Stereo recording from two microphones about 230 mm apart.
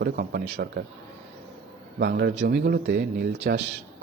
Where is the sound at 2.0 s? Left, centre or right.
Right.